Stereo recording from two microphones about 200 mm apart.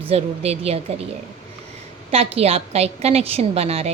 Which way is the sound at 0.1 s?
30° right (ahead or behind).